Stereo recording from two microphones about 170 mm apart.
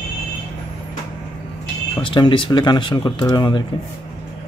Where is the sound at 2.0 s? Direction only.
30° left (ahead or behind).